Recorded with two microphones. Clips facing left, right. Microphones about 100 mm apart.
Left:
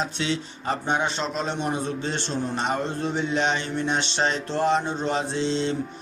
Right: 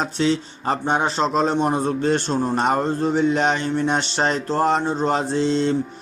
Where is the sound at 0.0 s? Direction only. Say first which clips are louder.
Right 6 dB; 40° right (ahead or behind).